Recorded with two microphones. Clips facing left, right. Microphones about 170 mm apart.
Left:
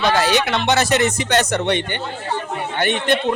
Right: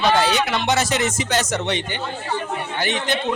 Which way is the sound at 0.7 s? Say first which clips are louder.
Left 6 dB; 65° left (ahead or behind).